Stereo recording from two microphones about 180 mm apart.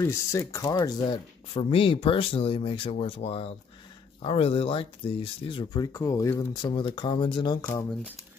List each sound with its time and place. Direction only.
0.0 s speech: 15° left (ahead or behind)